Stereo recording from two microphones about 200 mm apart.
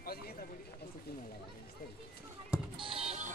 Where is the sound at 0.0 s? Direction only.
50° left (ahead or behind).